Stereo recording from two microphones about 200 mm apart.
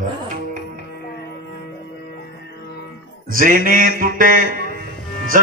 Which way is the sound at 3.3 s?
45° right (ahead or behind).